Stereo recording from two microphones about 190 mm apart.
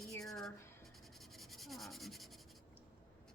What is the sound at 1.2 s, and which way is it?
Writing, centre (ahead or behind).